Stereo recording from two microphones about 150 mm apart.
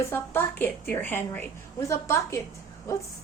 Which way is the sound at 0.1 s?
15° left (ahead or behind).